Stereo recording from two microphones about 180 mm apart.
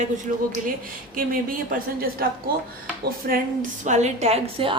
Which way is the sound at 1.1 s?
50° right (ahead or behind).